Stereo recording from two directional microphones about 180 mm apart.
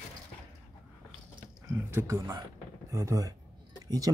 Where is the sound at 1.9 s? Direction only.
20° right (ahead or behind).